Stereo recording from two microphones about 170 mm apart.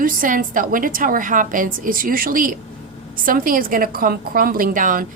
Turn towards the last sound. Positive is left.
turn(degrees=-50)  # may be behind; listen again after turning